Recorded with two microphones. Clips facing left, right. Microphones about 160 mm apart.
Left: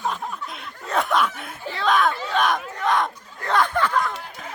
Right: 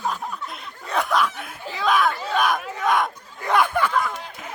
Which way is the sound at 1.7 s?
10° right (ahead or behind).